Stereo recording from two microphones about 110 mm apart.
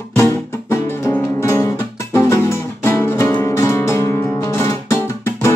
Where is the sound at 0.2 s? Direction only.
25° left (ahead or behind).